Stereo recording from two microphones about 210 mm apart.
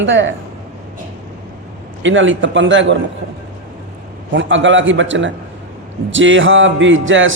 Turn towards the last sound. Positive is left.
turn(degrees=-65)  # may be behind; listen again after turning